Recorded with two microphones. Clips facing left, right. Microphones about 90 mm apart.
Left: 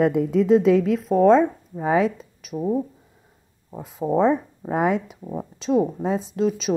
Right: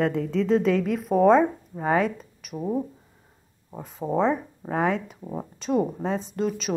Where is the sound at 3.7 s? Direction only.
5° left (ahead or behind).